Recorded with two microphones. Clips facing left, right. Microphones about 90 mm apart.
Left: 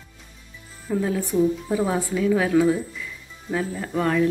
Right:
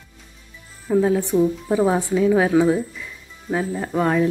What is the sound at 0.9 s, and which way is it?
A woman's voice, 25° right (ahead or behind).